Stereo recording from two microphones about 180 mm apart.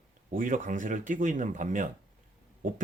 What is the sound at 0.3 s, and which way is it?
Speech, 45° right (ahead or behind).